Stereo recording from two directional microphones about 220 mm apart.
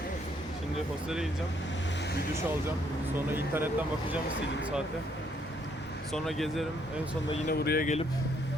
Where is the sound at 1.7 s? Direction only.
55° left (ahead or behind).